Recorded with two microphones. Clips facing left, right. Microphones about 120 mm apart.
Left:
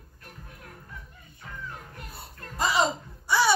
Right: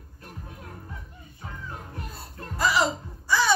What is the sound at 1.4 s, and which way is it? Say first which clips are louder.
Music: right 2 dB; 30° right (ahead or behind).